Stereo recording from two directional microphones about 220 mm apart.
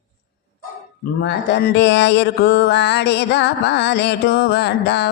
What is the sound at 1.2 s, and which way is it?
Speech, 50° left (ahead or behind).